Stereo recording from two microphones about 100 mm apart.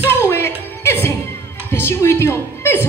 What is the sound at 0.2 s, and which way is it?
Music, 25° left (ahead or behind).